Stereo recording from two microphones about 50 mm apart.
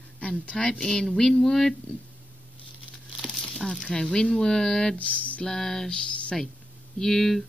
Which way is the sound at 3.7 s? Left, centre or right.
Centre.